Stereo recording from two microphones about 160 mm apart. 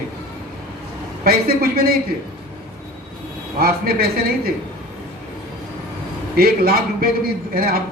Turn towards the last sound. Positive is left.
turn(degrees=-70)  # may be behind; listen again after turning